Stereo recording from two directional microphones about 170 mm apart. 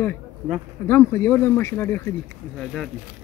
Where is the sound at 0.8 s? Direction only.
15° left (ahead or behind).